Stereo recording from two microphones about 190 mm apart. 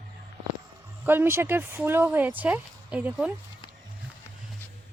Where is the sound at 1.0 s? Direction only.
10° right (ahead or behind).